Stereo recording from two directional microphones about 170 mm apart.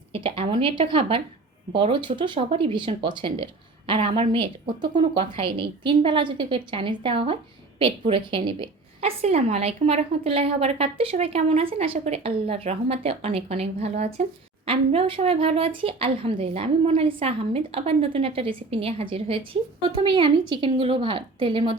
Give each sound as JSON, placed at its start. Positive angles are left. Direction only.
{"t": 0.1, "sound": "a woman's voice", "side_deg": -35}